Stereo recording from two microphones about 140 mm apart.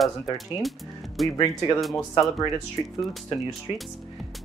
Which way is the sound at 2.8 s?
35° left (ahead or behind).